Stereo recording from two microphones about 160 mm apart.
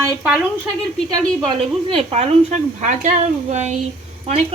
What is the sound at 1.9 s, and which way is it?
Speech, 40° right (ahead or behind).